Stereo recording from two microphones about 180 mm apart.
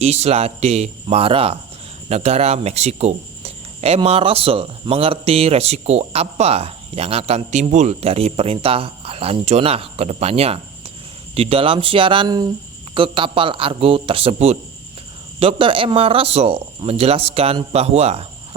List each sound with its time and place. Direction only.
0.0 s a man's voice: 35° right (ahead or behind)